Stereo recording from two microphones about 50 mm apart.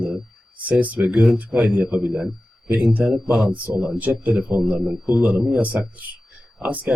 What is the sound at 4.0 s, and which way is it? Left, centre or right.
Speech, right.